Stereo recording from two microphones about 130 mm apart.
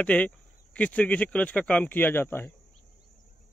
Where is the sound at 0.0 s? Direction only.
10° left (ahead or behind).